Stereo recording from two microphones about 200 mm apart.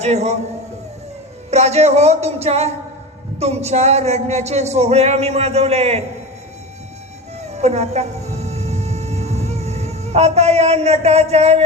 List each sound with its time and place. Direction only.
0.0 s speech: 35° right (ahead or behind)
1.5 s speech: 35° right (ahead or behind)
7.5 s music: 35° right (ahead or behind)